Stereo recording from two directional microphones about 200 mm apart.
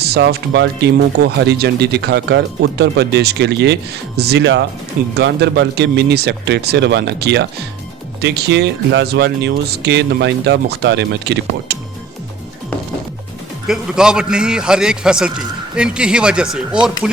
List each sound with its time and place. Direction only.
0.0 s speech: 50° right (ahead or behind)
13.7 s a man's voice: 5° right (ahead or behind)